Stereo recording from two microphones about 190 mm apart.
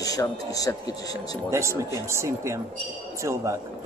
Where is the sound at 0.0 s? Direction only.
20° left (ahead or behind).